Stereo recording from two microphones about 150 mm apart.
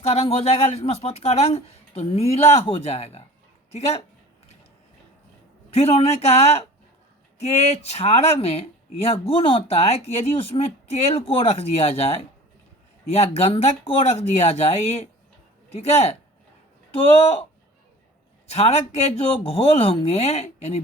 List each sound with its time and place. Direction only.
0.1 s speech: 45° left (ahead or behind)
5.7 s speech: 40° left (ahead or behind)
13.1 s speech: 40° left (ahead or behind)
18.4 s speech: 45° left (ahead or behind)